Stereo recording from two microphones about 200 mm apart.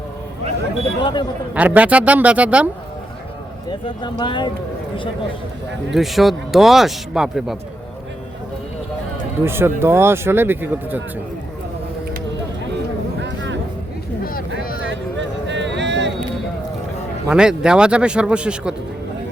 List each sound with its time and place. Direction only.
1.0 s speech: 20° left (ahead or behind)
1.5 s speech: 5° right (ahead or behind)
3.7 s speech: 25° left (ahead or behind)
5.9 s speech: centre (ahead or behind)
9.4 s speech: 10° right (ahead or behind)
13.1 s a sound: 65° right (ahead or behind)
15.4 s a sound: 60° right (ahead or behind)
17.2 s speech: 5° right (ahead or behind)